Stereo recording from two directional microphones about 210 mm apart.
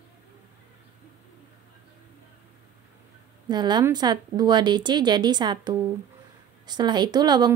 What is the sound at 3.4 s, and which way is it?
Speech, 20° right (ahead or behind).